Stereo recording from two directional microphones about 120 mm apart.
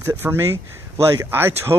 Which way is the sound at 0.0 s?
20° right (ahead or behind).